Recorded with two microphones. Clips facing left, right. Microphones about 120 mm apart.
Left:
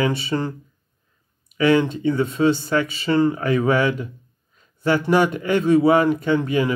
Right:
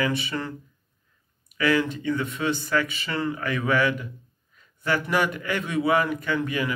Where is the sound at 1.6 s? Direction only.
25° left (ahead or behind).